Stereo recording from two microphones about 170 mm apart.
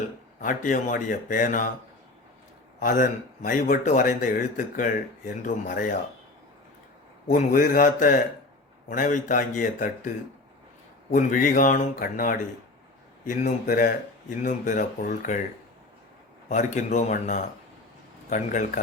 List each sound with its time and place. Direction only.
0.3 s a man's voice: 50° left (ahead or behind)
2.8 s a man's voice: 55° left (ahead or behind)
7.3 s a man's voice: 55° left (ahead or behind)
11.1 s a man's voice: 50° left (ahead or behind)
16.5 s a man's voice: 45° left (ahead or behind)